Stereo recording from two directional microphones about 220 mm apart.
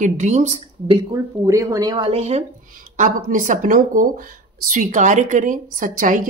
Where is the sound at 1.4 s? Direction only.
15° right (ahead or behind).